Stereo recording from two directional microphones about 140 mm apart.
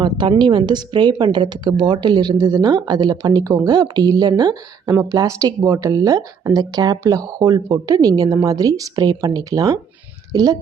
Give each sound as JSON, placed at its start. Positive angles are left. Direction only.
{"t": 0.0, "sound": "a woman's voice", "side_deg": -35}